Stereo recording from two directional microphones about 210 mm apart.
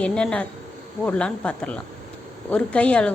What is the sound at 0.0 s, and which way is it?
A woman's voice, 5° left (ahead or behind).